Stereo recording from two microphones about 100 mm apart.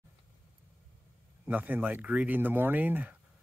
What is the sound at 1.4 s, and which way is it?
Speech, 15° right (ahead or behind).